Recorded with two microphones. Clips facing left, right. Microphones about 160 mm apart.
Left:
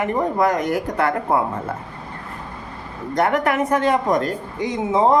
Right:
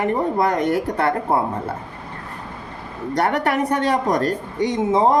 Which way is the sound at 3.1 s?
35° right (ahead or behind).